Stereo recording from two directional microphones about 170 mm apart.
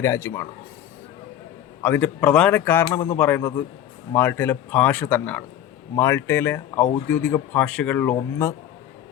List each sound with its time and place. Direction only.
0.0 s speech: 15° left (ahead or behind)
1.8 s speech: 10° left (ahead or behind)